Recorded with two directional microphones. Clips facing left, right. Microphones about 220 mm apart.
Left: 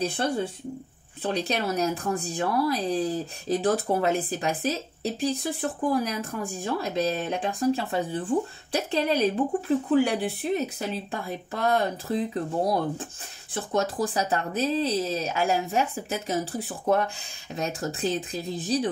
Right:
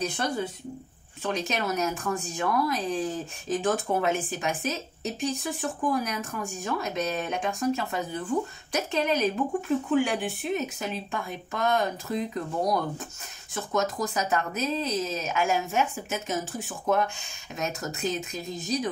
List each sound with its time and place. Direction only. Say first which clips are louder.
0.0 s speech: left 3 dB; 30° left (ahead or behind)